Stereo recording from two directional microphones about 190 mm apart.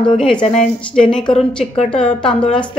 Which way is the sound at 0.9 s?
5° left (ahead or behind).